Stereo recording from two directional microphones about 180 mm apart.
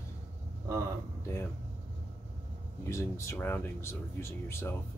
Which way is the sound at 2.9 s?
15° left (ahead or behind).